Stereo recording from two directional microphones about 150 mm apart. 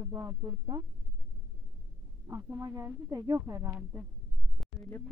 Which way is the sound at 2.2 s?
20° right (ahead or behind).